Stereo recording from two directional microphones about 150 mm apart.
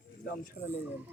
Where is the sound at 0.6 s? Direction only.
10° right (ahead or behind).